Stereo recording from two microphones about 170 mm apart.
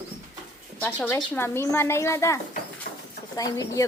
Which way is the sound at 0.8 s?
10° left (ahead or behind).